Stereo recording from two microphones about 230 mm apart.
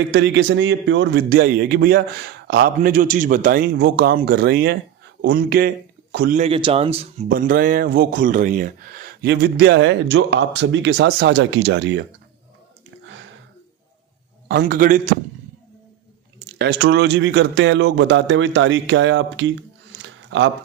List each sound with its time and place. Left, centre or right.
0.1 s a man's voice: right
6.4 s a man's voice: right
7.3 s speech: right
14.7 s a man's voice: right
16.6 s speech: right